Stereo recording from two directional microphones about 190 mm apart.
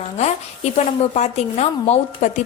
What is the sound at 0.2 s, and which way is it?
A woman's voice, 35° left (ahead or behind).